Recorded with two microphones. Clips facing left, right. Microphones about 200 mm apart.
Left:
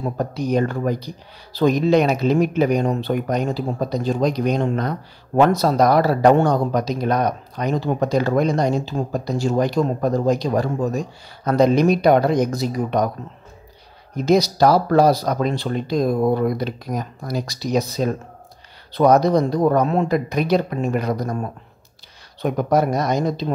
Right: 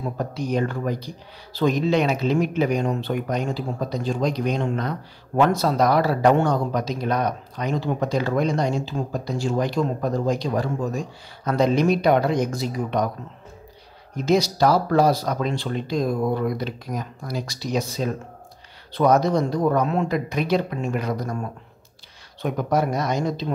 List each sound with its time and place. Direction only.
0.2 s a man's voice: 40° left (ahead or behind)
14.2 s a man's voice: 40° left (ahead or behind)